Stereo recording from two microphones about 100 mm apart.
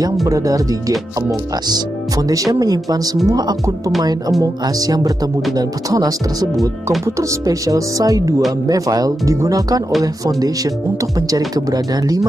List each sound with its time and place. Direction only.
0.3 s speech: 35° right (ahead or behind)